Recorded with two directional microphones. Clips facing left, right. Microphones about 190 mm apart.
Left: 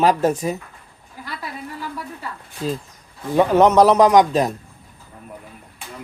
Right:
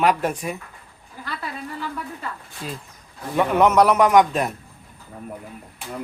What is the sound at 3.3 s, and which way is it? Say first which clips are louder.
Speech: left 3 dB; 35° left (ahead or behind).